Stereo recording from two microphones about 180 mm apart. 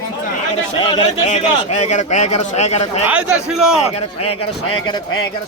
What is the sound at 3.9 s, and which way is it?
Speech, 30° left (ahead or behind).